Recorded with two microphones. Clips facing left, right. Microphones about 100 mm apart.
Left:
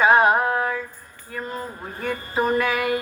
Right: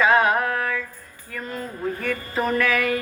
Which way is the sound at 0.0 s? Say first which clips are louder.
Left 2 dB; 25° left (ahead or behind).